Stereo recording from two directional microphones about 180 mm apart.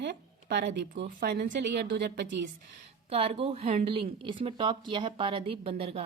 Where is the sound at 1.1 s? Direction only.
55° right (ahead or behind).